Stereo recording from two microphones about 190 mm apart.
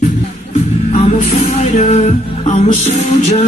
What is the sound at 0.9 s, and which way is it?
Music, 35° left (ahead or behind).